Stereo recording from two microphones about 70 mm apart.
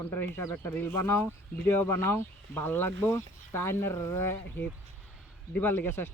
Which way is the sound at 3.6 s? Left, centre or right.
Left.